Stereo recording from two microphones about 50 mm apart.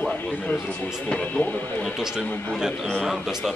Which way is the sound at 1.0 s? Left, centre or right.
Left.